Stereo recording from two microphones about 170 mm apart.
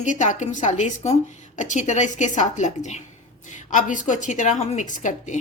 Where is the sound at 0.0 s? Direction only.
45° left (ahead or behind).